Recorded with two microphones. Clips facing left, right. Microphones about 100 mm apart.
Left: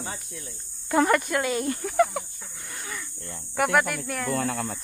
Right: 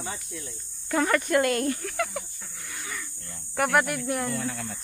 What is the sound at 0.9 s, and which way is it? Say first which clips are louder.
Speech: left 3 dB; 20° left (ahead or behind).